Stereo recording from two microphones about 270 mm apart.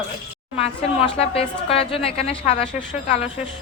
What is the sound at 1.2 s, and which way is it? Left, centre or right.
A woman's voice, left.